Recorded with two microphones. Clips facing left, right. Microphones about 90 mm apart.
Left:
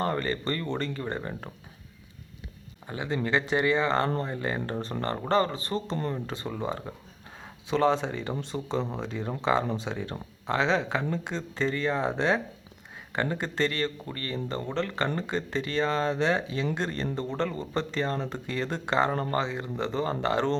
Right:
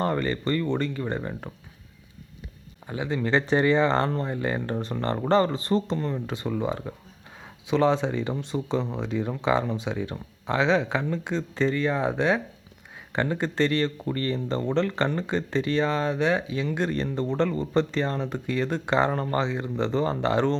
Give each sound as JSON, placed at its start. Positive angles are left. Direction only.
{"t": 0.0, "sound": "speech", "side_deg": -20}
{"t": 2.9, "sound": "speech", "side_deg": -15}
{"t": 8.8, "sound": "speech", "side_deg": 15}
{"t": 9.4, "sound": "speech", "side_deg": -15}
{"t": 13.1, "sound": "speech", "side_deg": -20}